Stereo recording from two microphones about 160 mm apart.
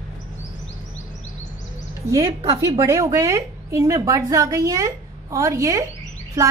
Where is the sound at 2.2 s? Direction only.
35° right (ahead or behind).